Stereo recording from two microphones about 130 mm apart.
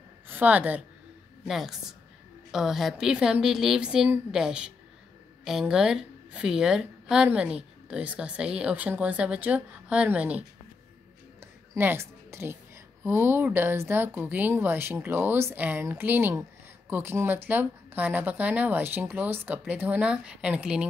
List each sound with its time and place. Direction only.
0.3 s a woman's voice: 15° right (ahead or behind)
11.7 s a woman's voice: 20° right (ahead or behind)